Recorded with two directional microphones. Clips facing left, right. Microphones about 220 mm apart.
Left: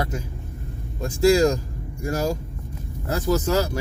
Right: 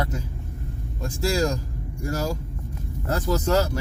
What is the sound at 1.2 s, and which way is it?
Speech, 15° left (ahead or behind).